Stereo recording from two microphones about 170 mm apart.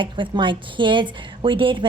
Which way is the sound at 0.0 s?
30° right (ahead or behind).